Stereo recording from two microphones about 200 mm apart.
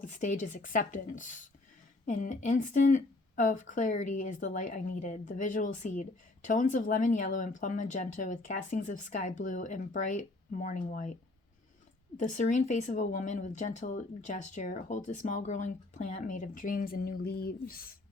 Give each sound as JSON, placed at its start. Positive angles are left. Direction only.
{"t": 0.0, "sound": "a woman's voice", "side_deg": 40}
{"t": 12.1, "sound": "a woman's voice", "side_deg": 40}